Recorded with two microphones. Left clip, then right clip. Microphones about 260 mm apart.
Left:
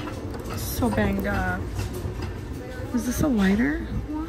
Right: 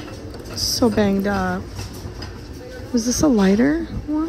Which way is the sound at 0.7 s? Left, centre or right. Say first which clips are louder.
Right 7 dB; right.